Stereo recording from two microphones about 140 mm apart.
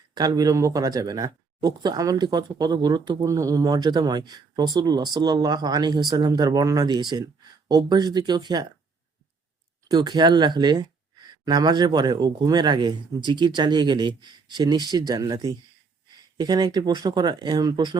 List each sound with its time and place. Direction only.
0.1 s speech: 30° right (ahead or behind)
9.9 s speech: 30° right (ahead or behind)